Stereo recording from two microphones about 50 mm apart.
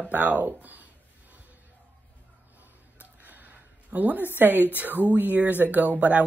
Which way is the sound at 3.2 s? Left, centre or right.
Right.